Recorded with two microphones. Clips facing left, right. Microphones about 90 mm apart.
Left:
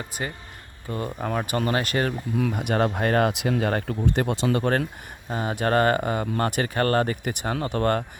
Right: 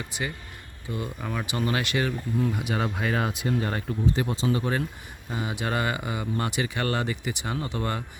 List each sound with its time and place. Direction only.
0.0 s speech: 40° left (ahead or behind); by 4.8 s 65° left (ahead or behind)
5.3 s speech: 45° left (ahead or behind)